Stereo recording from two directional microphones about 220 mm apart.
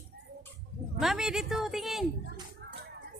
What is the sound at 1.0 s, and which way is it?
A woman's voice, centre (ahead or behind).